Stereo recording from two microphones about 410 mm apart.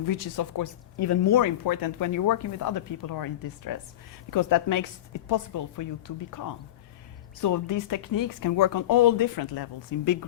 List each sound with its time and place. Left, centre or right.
0.0 s speech: left
7.4 s speech: left